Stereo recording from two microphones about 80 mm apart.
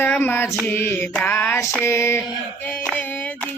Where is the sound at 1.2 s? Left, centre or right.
Left.